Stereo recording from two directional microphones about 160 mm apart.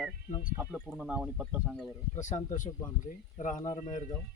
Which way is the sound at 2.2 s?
50° left (ahead or behind).